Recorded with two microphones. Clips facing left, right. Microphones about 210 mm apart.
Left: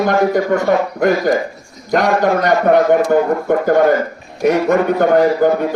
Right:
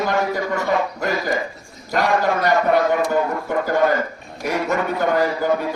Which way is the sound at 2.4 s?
55° left (ahead or behind).